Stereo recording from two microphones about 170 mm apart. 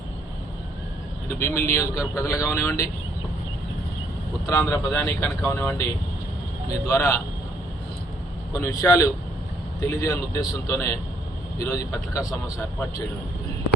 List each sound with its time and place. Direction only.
1.4 s a man's voice: 15° left (ahead or behind)
4.4 s a man's voice: 15° left (ahead or behind)
8.5 s a man's voice: 15° left (ahead or behind)